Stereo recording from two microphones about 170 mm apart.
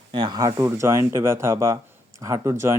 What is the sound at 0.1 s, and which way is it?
Speech, 25° right (ahead or behind).